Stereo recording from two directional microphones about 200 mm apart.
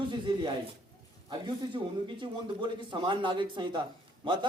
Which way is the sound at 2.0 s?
25° right (ahead or behind).